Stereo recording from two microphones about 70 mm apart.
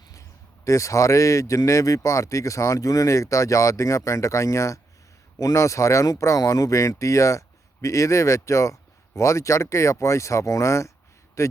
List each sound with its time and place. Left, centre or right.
0.1 s a man's voice: left